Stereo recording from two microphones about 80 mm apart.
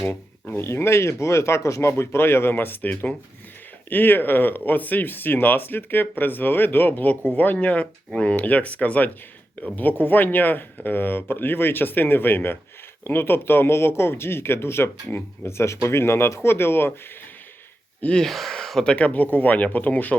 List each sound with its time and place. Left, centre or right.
0.1 s speech: left
18.0 s speech: centre